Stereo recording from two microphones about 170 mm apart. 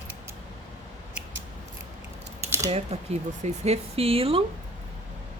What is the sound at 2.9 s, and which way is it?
Speech, 40° right (ahead or behind).